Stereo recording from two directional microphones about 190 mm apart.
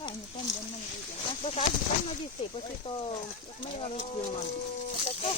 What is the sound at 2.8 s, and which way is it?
Speech, 30° left (ahead or behind).